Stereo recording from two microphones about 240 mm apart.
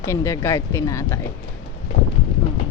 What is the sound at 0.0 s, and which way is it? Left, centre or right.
Speech, centre.